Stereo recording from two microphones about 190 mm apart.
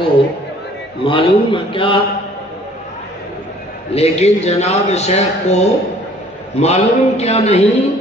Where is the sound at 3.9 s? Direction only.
35° left (ahead or behind).